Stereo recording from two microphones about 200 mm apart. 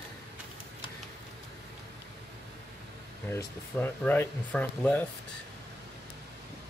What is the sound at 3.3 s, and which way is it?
Speech, 10° left (ahead or behind).